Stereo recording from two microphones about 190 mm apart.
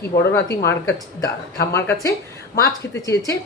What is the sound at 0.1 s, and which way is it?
Speech, 45° left (ahead or behind).